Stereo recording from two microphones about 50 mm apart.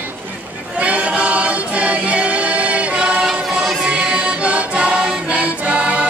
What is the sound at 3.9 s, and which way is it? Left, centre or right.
Music, right.